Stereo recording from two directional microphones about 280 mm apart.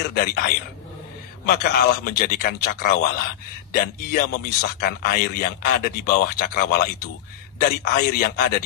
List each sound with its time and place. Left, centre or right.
0.0 s speech: left
1.5 s speech: left